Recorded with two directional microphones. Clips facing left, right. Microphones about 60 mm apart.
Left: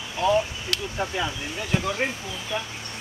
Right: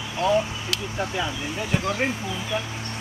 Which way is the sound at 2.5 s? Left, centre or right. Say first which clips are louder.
Right 1 dB; centre.